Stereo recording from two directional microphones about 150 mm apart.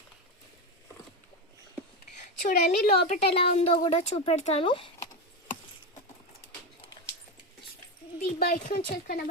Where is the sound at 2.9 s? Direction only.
55° left (ahead or behind).